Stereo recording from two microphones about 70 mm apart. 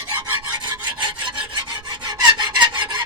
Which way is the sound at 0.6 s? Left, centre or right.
Right.